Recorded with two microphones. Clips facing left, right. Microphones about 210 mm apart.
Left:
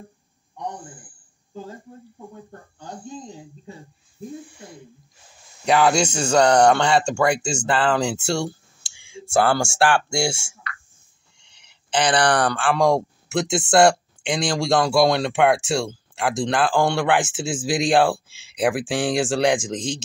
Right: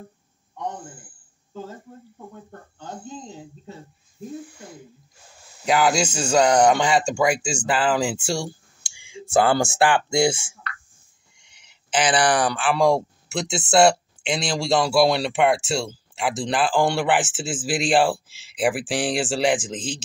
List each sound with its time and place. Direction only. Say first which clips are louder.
5.7 s a man's voice: left 2 dB; 5° right (ahead or behind)
11.3 s speech: left 1 dB; 5° right (ahead or behind)